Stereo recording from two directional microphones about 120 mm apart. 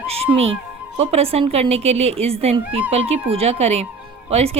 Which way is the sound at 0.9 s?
55° right (ahead or behind).